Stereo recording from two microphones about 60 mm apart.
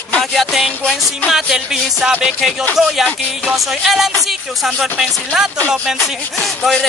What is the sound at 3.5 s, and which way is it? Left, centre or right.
A man's voice, centre.